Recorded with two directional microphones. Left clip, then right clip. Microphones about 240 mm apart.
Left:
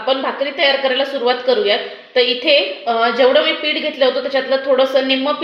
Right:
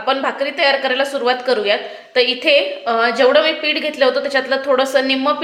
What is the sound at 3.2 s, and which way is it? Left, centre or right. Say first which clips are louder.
Speech: even; centre.